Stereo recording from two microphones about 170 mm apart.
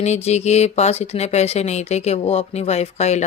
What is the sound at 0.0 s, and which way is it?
Speech, 40° left (ahead or behind).